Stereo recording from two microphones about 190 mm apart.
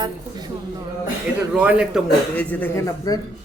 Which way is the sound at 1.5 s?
5° right (ahead or behind).